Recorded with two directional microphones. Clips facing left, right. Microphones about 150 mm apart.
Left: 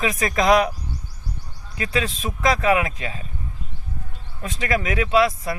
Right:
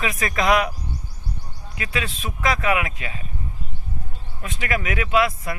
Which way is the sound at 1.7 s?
35° left (ahead or behind).